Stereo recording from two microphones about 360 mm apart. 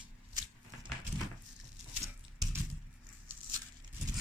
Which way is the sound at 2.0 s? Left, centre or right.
Centre.